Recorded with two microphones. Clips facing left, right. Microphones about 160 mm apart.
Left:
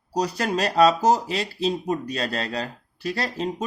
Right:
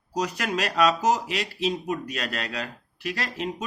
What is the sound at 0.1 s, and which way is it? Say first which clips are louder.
Speech: left 3 dB; 35° left (ahead or behind).